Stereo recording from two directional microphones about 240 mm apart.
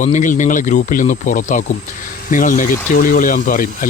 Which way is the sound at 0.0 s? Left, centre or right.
Left.